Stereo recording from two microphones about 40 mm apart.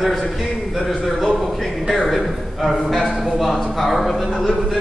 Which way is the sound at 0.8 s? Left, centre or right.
Centre.